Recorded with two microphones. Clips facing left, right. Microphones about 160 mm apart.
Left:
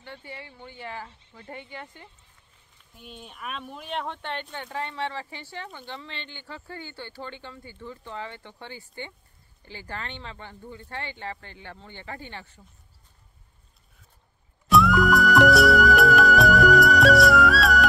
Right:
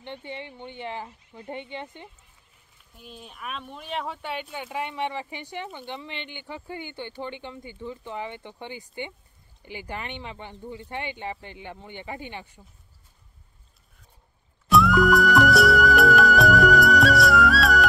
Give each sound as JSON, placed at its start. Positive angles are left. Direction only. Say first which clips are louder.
{"t": 0.0, "sound": "speech", "louder": "right 5 dB", "side_deg": -20}
{"t": 3.0, "sound": "speech", "louder": "even", "side_deg": 0}
{"t": 14.7, "sound": "music", "louder": "right 1 dB", "side_deg": 0}